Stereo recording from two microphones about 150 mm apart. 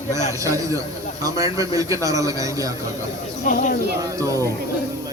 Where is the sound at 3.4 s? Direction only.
65° left (ahead or behind).